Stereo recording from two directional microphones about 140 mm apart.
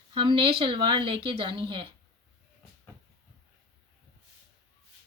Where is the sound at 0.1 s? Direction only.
35° right (ahead or behind).